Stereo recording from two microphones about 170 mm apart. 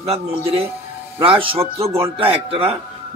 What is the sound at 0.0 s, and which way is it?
A man's voice, 35° right (ahead or behind).